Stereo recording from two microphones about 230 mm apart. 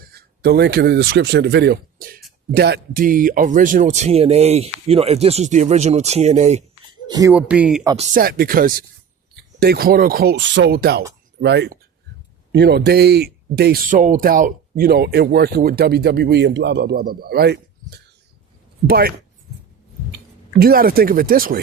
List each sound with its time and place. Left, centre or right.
0.1 s speech: right
7.1 s speech: centre
7.9 s speech: right
20.1 s speech: right